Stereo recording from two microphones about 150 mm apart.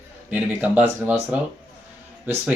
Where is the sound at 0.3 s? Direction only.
10° right (ahead or behind).